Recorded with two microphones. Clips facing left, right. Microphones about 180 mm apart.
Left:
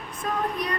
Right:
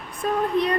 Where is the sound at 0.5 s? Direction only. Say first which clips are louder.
Right 9 dB; 25° right (ahead or behind).